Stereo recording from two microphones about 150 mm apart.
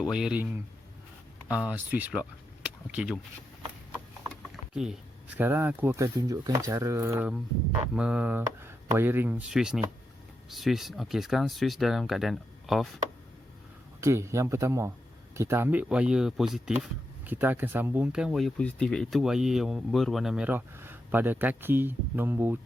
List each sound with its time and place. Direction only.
0.0 s speech: 5° right (ahead or behind)
2.6 s a sound: 5° right (ahead or behind)
4.5 s typing: 5° right (ahead or behind)
5.4 s speech: 15° right (ahead or behind)
9.5 s speech: 5° right (ahead or behind)
14.0 s speech: 20° right (ahead or behind); by 16.7 s 5° right (ahead or behind)
17.2 s speech: 15° right (ahead or behind)